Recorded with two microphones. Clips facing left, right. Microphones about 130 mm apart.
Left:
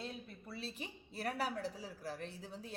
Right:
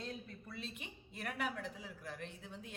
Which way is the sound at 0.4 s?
35° left (ahead or behind).